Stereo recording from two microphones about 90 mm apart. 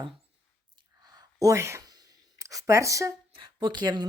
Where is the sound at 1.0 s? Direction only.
45° right (ahead or behind).